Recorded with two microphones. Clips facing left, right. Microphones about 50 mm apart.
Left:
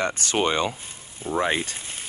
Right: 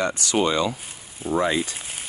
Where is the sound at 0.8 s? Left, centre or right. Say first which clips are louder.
Right 1 dB; centre.